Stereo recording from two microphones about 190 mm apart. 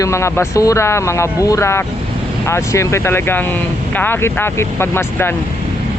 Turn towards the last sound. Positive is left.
turn(degrees=10)  # may be behind; listen again after turning